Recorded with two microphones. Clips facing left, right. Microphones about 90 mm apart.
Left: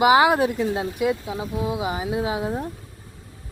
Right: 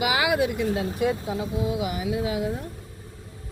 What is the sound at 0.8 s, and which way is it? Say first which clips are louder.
Speech: left 1 dB; 30° right (ahead or behind).